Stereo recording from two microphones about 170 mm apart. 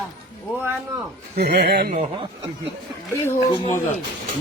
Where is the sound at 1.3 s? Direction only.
70° right (ahead or behind).